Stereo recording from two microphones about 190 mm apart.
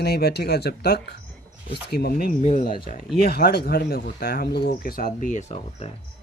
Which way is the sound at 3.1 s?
50° left (ahead or behind).